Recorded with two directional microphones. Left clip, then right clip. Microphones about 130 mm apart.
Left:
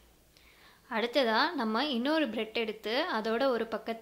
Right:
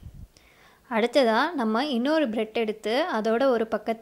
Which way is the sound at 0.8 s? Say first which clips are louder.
Right 7 dB; 40° right (ahead or behind).